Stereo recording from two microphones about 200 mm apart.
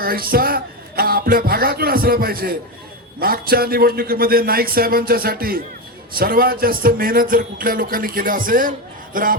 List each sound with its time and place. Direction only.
0.0 s music: 45° right (ahead or behind)
3.2 s a man's voice: 50° right (ahead or behind)